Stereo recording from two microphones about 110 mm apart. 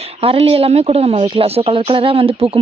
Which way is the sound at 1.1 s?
50° right (ahead or behind).